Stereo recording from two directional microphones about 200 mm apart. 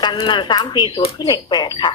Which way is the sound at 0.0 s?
20° left (ahead or behind).